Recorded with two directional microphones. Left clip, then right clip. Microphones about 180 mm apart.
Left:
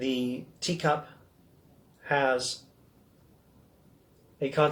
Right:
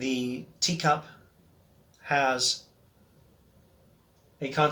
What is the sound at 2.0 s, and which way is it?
Speech, 20° right (ahead or behind).